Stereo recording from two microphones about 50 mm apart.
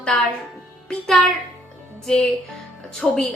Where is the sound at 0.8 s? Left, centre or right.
Centre.